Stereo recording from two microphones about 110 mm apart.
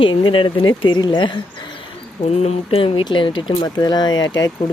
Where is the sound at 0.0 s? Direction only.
50° left (ahead or behind).